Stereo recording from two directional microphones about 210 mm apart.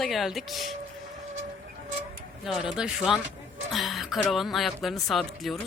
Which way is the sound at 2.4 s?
Centre (ahead or behind).